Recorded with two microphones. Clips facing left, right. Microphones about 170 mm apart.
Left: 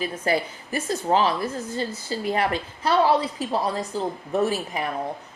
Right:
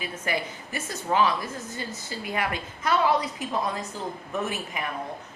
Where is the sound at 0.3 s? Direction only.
35° left (ahead or behind).